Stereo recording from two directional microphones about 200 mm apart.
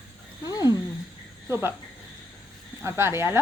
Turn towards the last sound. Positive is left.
turn(degrees=-10)  # may be behind; listen again after turning